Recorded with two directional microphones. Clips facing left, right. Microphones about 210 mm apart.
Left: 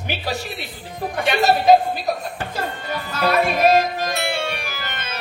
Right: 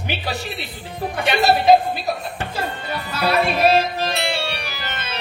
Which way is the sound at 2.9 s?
45° left (ahead or behind).